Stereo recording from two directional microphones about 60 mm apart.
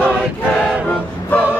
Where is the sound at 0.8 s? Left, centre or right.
Left.